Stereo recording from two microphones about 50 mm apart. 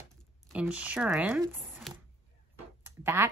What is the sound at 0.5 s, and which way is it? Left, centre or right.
Speech, right.